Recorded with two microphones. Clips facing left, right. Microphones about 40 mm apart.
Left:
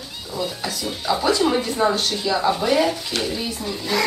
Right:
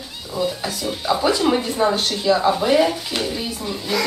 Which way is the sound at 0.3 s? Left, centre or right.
Centre.